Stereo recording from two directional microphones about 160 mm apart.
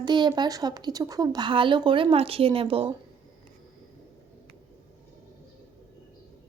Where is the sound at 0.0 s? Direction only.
30° right (ahead or behind).